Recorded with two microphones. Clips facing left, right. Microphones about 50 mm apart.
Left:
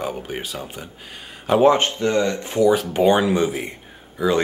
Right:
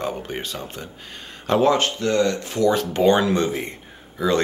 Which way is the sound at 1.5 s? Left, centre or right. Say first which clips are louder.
Left 3 dB; centre.